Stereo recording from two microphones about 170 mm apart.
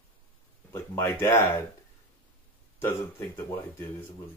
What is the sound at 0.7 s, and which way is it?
Speech, 15° left (ahead or behind).